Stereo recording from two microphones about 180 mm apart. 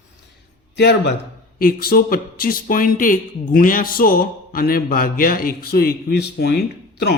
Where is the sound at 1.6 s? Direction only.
55° left (ahead or behind).